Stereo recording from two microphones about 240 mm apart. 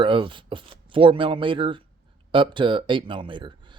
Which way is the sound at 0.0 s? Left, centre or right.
Right.